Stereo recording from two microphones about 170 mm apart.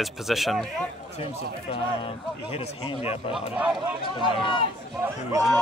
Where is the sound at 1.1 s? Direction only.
35° left (ahead or behind).